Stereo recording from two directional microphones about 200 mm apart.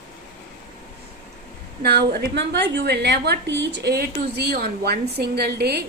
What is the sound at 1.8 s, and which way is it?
A woman's voice, 50° right (ahead or behind).